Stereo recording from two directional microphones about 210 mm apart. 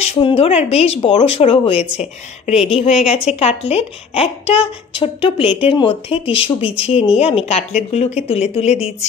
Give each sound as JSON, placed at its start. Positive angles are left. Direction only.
{"t": 0.0, "sound": "a woman's voice", "side_deg": 30}